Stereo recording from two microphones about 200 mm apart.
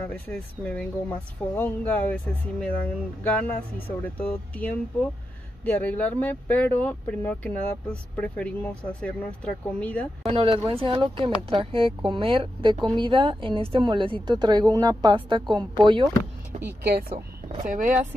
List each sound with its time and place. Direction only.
0.0 s speech: 10° left (ahead or behind)
10.2 s a woman's voice: 25° right (ahead or behind)
16.5 s speech: 35° right (ahead or behind)
17.6 s speech: 40° right (ahead or behind)